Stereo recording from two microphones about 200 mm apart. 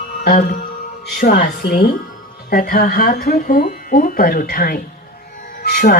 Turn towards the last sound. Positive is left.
turn(degrees=50)  # may be behind; listen again after turning